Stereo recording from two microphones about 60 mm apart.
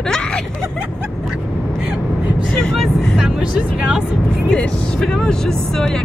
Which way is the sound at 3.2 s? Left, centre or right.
Centre.